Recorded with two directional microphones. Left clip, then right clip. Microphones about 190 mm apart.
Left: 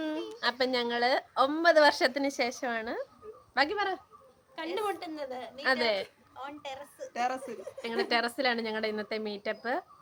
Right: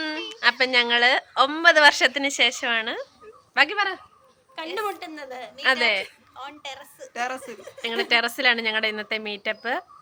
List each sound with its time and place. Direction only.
0.0 s a woman's voice: 10° right (ahead or behind)
2.1 s a woman's voice: 35° right (ahead or behind)
3.5 s a woman's voice: 10° right (ahead or behind)
6.3 s a woman's voice: centre (ahead or behind)
7.1 s a woman's voice: 15° right (ahead or behind)